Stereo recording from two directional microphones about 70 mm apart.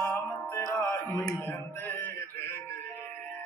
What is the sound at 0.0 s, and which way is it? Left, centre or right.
Music, left.